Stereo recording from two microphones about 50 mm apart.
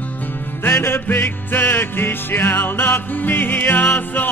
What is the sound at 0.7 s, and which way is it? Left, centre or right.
Music, left.